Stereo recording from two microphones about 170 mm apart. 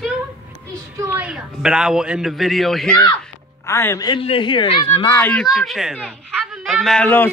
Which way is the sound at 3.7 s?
15° left (ahead or behind).